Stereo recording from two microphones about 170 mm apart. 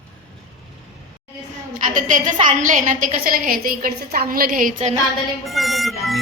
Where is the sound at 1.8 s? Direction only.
50° right (ahead or behind).